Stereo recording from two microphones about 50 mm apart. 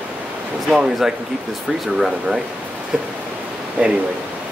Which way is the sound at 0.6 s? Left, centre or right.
Centre.